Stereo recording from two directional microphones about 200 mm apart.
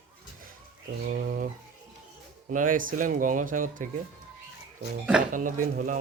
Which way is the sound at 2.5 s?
40° right (ahead or behind).